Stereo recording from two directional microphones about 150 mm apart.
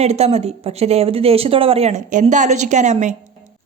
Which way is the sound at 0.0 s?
45° right (ahead or behind).